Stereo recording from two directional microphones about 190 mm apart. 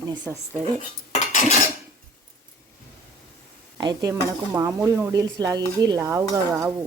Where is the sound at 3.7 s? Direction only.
20° right (ahead or behind).